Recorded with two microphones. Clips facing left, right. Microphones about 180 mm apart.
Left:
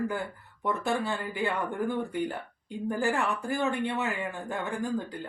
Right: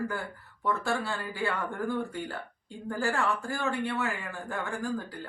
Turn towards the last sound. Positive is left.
turn(degrees=20)  # may be behind; listen again after turning